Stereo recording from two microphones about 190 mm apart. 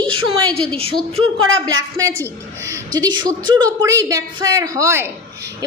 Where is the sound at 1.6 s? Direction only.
15° right (ahead or behind).